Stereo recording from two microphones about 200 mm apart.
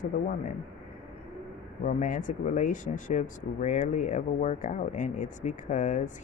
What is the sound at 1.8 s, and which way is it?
Speech, 40° left (ahead or behind).